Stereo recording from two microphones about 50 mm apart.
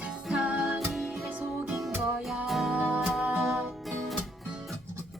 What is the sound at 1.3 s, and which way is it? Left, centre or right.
Music, right.